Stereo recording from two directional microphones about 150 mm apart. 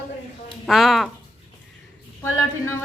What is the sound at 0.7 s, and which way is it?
Speech, centre (ahead or behind).